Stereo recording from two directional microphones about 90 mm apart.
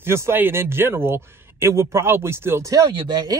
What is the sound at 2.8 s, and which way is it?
Speech, 60° right (ahead or behind).